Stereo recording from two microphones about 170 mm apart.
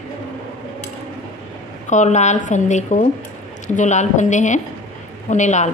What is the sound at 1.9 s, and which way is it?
Speech, 45° left (ahead or behind).